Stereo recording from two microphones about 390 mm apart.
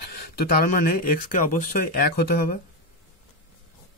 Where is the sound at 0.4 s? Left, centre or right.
Left.